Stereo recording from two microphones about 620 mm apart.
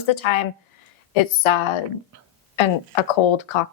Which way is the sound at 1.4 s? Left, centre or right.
Left.